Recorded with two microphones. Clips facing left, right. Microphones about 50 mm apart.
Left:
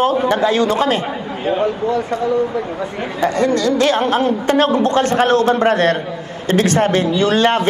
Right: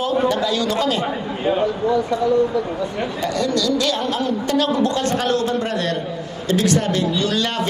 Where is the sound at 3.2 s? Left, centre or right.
Left.